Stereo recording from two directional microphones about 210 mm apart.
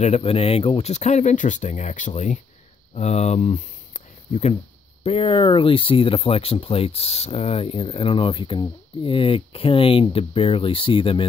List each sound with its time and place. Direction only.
0.0 s speech: 30° left (ahead or behind)